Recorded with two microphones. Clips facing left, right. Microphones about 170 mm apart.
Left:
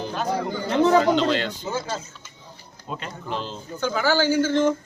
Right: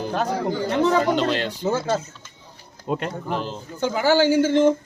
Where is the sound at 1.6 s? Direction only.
45° right (ahead or behind).